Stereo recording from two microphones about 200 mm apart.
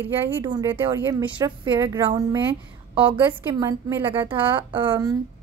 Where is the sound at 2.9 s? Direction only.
25° right (ahead or behind).